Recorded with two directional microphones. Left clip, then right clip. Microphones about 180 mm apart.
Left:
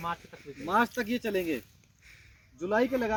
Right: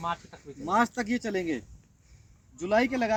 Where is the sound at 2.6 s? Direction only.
25° right (ahead or behind).